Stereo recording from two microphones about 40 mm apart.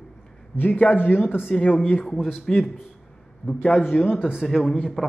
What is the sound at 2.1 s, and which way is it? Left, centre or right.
Speech, centre.